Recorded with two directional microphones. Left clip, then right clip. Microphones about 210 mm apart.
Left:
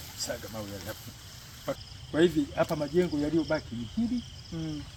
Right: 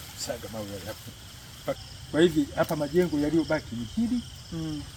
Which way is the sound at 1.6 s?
15° right (ahead or behind).